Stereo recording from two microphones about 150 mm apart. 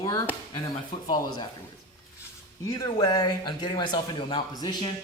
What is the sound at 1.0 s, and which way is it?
Speech, 30° left (ahead or behind).